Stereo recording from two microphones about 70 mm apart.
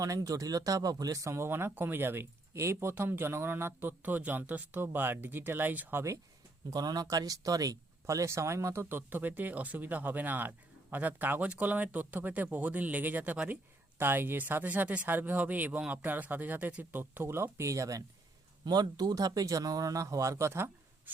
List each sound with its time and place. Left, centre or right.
0.0 s speech: right
2.9 s speech: right
6.7 s speech: right
14.0 s speech: right
17.2 s speech: right
18.6 s speech: right